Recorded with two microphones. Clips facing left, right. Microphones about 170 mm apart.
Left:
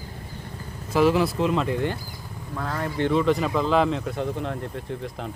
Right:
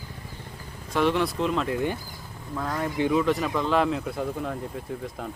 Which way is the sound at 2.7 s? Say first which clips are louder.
Left 1 dB; 10° right (ahead or behind).